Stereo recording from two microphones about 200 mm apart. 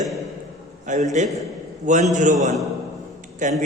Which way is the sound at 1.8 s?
35° right (ahead or behind).